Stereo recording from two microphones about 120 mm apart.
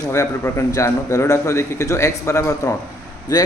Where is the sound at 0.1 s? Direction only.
25° left (ahead or behind).